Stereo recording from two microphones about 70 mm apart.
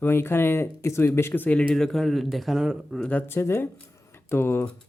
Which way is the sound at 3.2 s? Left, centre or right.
Left.